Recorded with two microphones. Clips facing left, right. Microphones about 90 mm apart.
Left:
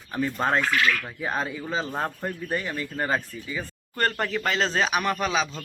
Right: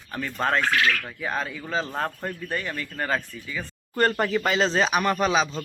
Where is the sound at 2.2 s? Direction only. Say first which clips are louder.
Left 1 dB; 15° left (ahead or behind).